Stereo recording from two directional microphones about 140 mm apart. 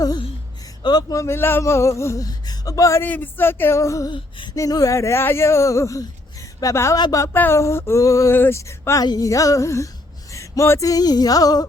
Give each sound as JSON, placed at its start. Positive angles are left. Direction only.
{"t": 0.8, "sound": "speech", "side_deg": 30}
{"t": 4.1, "sound": "a sound", "side_deg": 35}
{"t": 4.5, "sound": "speech", "side_deg": 25}